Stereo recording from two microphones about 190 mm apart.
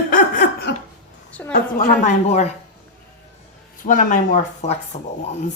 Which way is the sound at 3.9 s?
45° left (ahead or behind).